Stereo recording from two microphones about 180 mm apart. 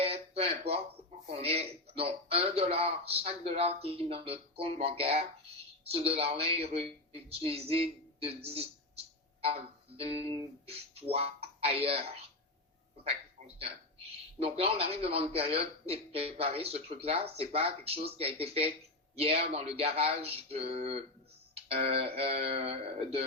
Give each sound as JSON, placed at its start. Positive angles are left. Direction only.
{"t": 0.0, "sound": "a sound", "side_deg": -35}
{"t": 1.4, "sound": "a man's voice", "side_deg": -35}
{"t": 10.0, "sound": "a man's voice", "side_deg": -35}
{"t": 14.3, "sound": "a man's voice", "side_deg": -35}